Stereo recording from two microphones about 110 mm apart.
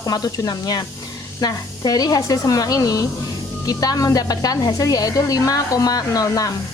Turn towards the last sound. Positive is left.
turn(degrees=35)  # may be behind; listen again after turning